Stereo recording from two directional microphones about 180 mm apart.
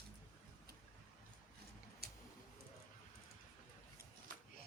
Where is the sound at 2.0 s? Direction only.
60° right (ahead or behind).